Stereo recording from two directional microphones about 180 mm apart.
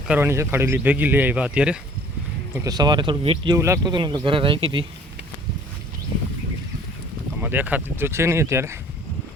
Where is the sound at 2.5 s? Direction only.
20° right (ahead or behind).